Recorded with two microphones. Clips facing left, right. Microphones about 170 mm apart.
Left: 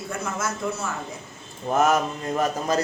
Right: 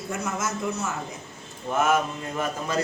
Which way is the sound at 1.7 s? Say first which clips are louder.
Left 2 dB; 40° left (ahead or behind).